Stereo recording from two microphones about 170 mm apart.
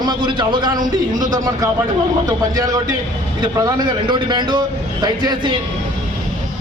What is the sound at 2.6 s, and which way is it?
A man's voice, 20° right (ahead or behind).